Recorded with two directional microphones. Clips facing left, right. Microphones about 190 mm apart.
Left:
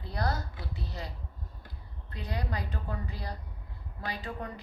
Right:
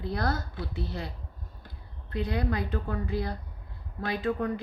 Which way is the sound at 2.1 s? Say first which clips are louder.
Right 7 dB; 55° right (ahead or behind).